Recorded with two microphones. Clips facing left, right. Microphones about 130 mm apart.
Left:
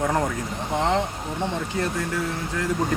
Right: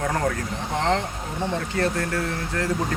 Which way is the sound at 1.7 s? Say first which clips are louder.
Right 2 dB; 10° left (ahead or behind).